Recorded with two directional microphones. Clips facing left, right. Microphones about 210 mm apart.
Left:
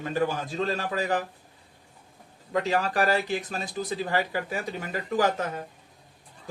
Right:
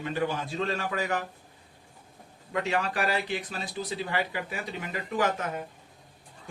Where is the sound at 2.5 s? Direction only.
35° left (ahead or behind).